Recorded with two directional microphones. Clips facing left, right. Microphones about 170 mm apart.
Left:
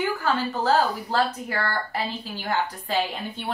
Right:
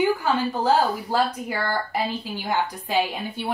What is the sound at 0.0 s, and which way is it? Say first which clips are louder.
A woman's voice: right 3 dB; 15° right (ahead or behind).